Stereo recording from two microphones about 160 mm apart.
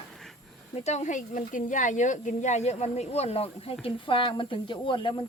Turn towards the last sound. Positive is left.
turn(degrees=30)  # may be behind; listen again after turning